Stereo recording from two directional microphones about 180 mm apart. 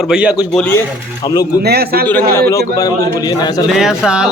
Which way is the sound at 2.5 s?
20° left (ahead or behind).